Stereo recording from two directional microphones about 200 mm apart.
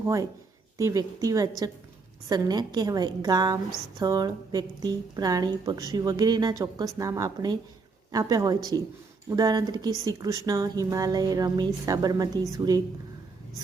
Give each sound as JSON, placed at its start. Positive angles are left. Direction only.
{"t": 0.0, "sound": "a woman's voice", "side_deg": -15}